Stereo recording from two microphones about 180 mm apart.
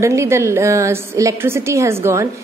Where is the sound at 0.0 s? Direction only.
15° right (ahead or behind).